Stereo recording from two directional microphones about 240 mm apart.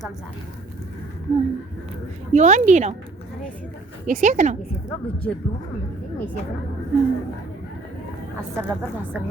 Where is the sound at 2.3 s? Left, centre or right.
Right.